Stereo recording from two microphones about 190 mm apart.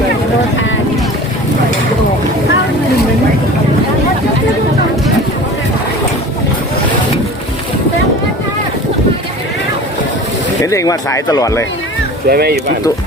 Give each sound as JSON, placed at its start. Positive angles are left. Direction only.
{"t": 10.6, "sound": "speech", "side_deg": 15}
{"t": 12.3, "sound": "speech", "side_deg": -55}